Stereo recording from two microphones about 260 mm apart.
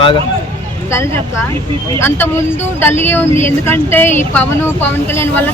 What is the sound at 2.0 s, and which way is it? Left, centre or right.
Speech, centre.